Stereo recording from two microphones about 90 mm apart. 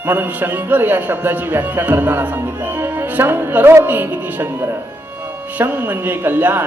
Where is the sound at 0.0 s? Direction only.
20° right (ahead or behind).